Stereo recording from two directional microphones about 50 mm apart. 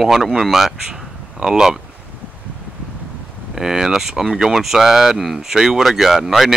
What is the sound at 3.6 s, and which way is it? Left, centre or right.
Speech, centre.